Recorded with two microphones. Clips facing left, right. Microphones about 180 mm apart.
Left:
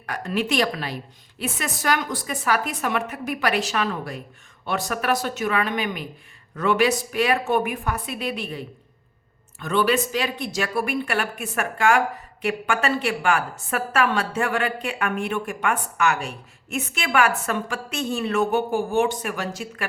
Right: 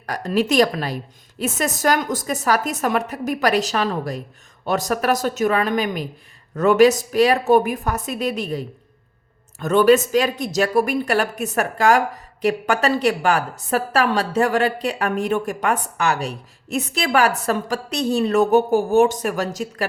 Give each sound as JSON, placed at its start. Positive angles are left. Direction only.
{"t": 0.0, "sound": "speech", "side_deg": -40}